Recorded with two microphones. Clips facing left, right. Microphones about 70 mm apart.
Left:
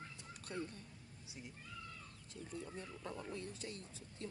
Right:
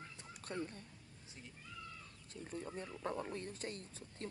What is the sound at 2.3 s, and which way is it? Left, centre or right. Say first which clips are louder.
Speech: right 2 dB; right.